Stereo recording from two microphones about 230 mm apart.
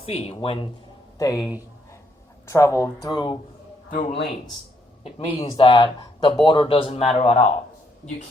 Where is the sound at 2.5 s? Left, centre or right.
Centre.